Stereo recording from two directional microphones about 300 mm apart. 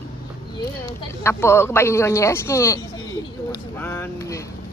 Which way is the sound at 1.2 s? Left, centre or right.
Centre.